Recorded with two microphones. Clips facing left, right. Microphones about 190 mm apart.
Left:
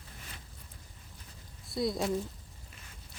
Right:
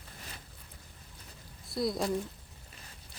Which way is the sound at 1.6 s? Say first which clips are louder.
Even; centre (ahead or behind).